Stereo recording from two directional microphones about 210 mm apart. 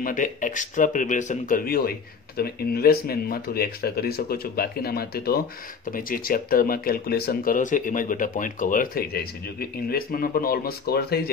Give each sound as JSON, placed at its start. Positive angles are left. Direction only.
{"t": 0.0, "sound": "speech", "side_deg": 40}